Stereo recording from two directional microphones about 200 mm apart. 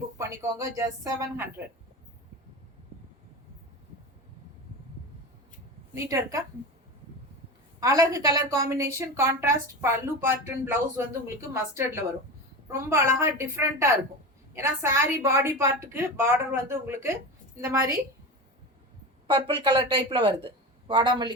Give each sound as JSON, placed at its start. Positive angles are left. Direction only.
{"t": 0.2, "sound": "a woman's voice", "side_deg": -15}
{"t": 5.9, "sound": "a woman's voice", "side_deg": -15}
{"t": 7.8, "sound": "a woman's voice", "side_deg": -15}
{"t": 19.3, "sound": "speech", "side_deg": -25}